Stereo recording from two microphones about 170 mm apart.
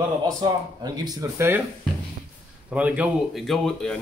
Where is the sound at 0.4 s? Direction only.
25° right (ahead or behind).